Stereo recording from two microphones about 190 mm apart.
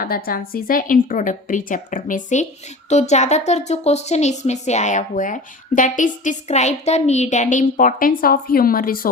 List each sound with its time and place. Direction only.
0.0 s a woman's voice: 50° left (ahead or behind)